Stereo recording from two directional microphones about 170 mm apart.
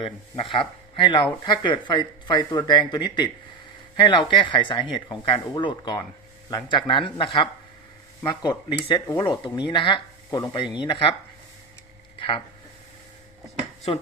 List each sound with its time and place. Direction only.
0.0 s speech: 30° left (ahead or behind)